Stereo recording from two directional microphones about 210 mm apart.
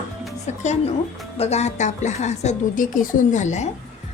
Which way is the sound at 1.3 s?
30° left (ahead or behind).